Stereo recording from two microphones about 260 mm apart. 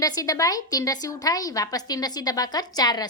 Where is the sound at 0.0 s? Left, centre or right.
Centre.